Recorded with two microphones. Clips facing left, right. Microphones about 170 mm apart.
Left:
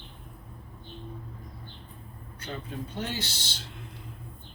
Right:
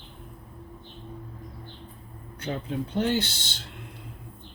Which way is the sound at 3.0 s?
60° right (ahead or behind).